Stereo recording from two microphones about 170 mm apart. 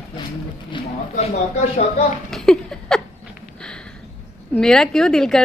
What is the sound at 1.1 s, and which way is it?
Speech, 40° left (ahead or behind).